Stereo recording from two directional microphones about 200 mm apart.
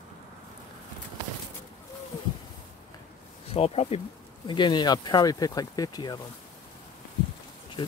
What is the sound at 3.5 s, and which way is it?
Speech, 30° left (ahead or behind).